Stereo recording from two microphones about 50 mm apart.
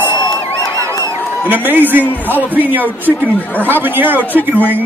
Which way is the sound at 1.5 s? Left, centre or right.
Right.